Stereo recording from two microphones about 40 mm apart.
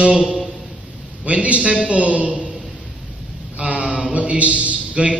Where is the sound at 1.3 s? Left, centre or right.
Right.